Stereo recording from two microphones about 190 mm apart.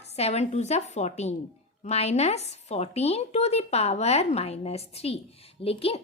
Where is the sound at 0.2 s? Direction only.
35° left (ahead or behind).